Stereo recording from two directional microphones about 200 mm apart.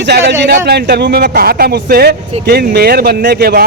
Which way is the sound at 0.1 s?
55° right (ahead or behind).